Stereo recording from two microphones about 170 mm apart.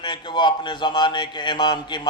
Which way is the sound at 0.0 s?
25° left (ahead or behind).